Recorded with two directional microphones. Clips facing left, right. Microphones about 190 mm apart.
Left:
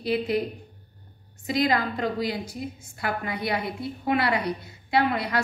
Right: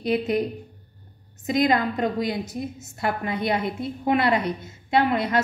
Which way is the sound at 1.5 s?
20° right (ahead or behind).